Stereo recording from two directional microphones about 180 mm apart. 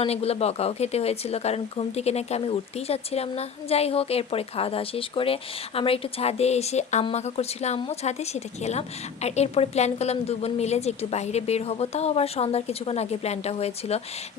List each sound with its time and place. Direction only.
0.0 s speech: 35° left (ahead or behind)